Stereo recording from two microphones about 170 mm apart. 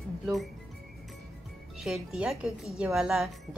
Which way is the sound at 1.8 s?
5° right (ahead or behind).